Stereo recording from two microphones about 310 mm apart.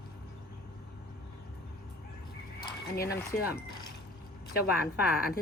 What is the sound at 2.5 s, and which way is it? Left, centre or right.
Speech, left.